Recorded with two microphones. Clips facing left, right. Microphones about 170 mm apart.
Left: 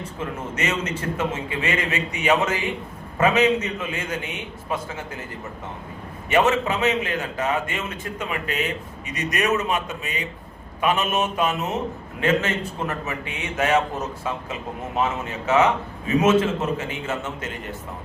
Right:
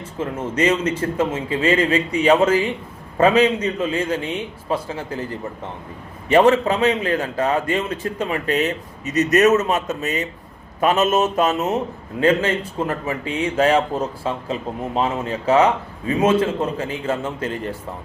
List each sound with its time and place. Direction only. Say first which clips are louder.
0.2 s a man's voice: right 8 dB; 30° right (ahead or behind)
6.2 s a man's voice: right 5 dB; 35° right (ahead or behind)